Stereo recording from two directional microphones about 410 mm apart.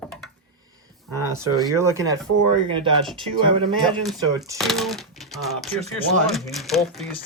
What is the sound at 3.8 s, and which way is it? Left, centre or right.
Speech, centre.